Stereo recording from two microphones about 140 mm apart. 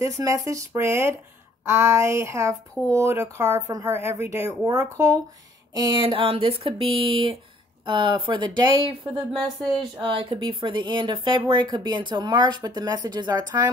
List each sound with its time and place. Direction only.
0.0 s speech: 20° right (ahead or behind)
5.8 s a woman's voice: 35° right (ahead or behind)